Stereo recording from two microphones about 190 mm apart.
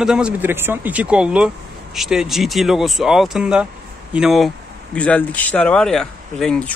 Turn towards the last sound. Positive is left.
turn(degrees=5)  # may be behind; listen again after turning